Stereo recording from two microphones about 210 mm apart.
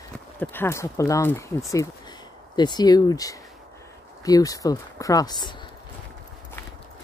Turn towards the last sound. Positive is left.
turn(degrees=20)  # may be behind; listen again after turning